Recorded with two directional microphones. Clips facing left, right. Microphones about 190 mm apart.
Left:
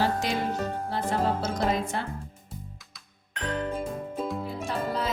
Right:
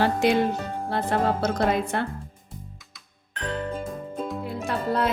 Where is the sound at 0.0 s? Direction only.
60° right (ahead or behind).